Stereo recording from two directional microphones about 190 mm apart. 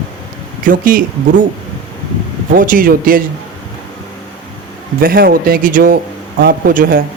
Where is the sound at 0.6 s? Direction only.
45° right (ahead or behind).